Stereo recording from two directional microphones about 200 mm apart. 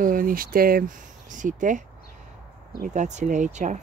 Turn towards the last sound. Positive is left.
turn(degrees=-35)  # may be behind; listen again after turning